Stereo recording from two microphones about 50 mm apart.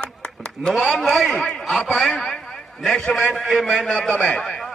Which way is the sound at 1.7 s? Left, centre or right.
Centre.